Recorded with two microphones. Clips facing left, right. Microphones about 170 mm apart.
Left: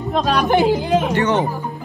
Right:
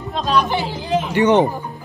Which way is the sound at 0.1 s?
50° left (ahead or behind).